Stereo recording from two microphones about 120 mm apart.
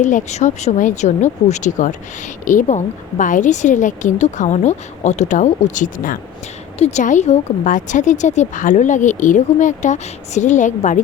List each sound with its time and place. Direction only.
0.0 s a woman's voice: 90° left
6.7 s a woman's voice: 65° left (ahead or behind); by 11.0 s 90° left